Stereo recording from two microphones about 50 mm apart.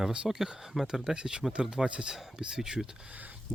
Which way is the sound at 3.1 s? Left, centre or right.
Right.